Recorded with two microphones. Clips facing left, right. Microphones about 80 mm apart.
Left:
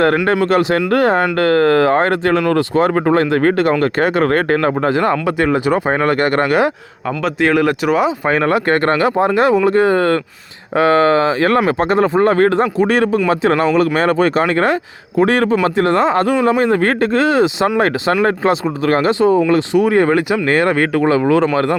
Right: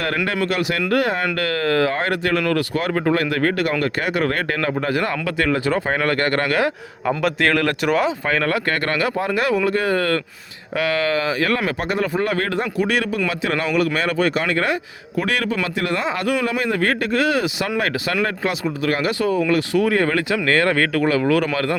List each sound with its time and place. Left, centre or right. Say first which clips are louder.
0.0 s speech: left 8 dB; left
7.4 s speech: left 6 dB; centre
8.3 s speech: left 6 dB; left